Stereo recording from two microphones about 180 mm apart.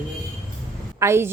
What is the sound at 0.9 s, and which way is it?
Speech, 15° right (ahead or behind).